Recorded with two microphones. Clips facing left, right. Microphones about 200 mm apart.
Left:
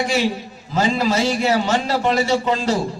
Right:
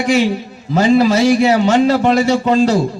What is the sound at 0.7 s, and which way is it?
A man's voice, 55° right (ahead or behind).